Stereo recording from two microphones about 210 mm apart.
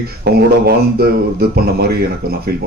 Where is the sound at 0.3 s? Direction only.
50° right (ahead or behind).